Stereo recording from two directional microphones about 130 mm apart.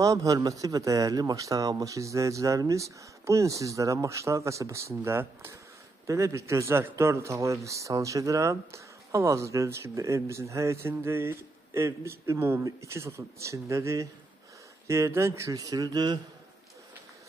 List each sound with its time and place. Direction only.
0.0 s a man's voice: 25° right (ahead or behind)